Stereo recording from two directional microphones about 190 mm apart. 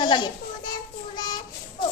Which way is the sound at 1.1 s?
20° left (ahead or behind).